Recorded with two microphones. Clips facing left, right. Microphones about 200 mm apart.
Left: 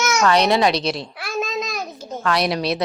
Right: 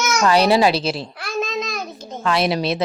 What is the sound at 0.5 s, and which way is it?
Babbling, 5° right (ahead or behind).